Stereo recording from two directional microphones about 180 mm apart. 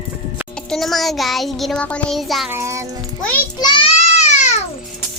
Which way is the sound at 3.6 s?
25° left (ahead or behind).